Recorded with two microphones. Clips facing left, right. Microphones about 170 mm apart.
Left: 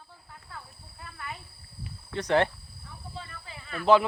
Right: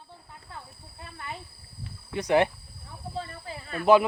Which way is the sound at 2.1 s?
10° right (ahead or behind).